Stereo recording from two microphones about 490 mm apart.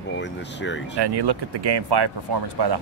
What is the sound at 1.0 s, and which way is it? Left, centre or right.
Speech, right.